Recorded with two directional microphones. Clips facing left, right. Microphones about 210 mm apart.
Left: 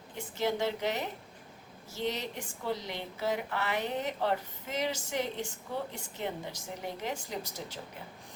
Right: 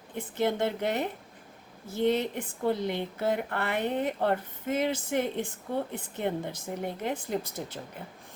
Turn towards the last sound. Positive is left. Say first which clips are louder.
# right 6 dB
turn(degrees=-55)  # may be behind; listen again after turning